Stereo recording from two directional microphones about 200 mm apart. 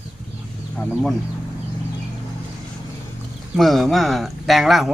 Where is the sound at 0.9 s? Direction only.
Centre (ahead or behind).